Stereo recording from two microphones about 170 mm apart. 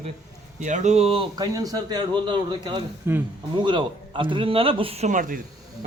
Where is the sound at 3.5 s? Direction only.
30° right (ahead or behind).